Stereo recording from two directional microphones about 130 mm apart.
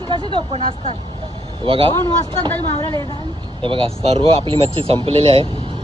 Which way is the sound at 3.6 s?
40° right (ahead or behind).